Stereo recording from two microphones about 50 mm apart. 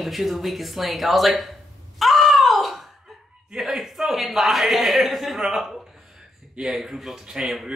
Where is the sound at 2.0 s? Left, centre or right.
Centre.